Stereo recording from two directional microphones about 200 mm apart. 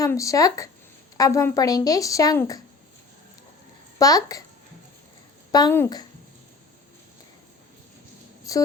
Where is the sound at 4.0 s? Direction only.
15° left (ahead or behind).